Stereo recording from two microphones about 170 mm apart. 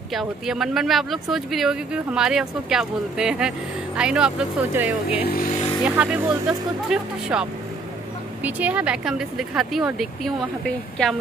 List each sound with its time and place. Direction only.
0.1 s speech: centre (ahead or behind)
5.2 s speech: 65° left (ahead or behind)
5.9 s speech: 5° right (ahead or behind)